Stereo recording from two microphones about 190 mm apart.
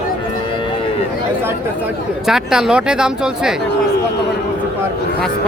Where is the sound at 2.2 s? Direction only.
5° right (ahead or behind).